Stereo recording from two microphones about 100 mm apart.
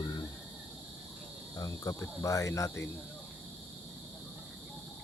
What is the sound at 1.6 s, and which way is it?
Speech, 35° left (ahead or behind).